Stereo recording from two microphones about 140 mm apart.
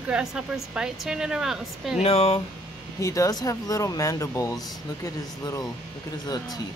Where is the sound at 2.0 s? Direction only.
45° left (ahead or behind).